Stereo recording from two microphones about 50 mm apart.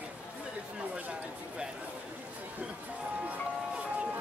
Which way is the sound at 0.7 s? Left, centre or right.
Right.